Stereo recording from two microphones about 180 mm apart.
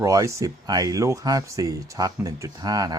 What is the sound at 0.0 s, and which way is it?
Speech, 20° right (ahead or behind).